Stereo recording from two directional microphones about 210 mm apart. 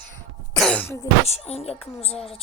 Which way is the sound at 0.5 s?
5° left (ahead or behind).